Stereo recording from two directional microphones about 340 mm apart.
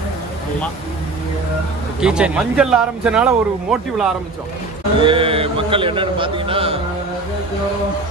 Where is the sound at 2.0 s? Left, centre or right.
Centre.